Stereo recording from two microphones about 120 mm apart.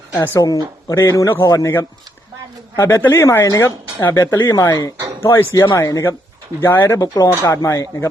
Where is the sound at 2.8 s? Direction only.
20° left (ahead or behind).